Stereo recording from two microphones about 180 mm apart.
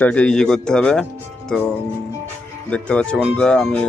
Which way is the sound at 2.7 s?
5° left (ahead or behind).